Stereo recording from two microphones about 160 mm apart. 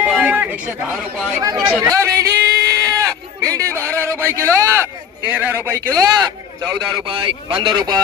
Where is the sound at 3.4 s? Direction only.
20° right (ahead or behind).